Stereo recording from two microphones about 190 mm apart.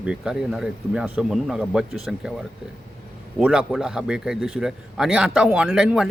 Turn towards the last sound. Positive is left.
turn(degrees=-5)  # may be behind; listen again after turning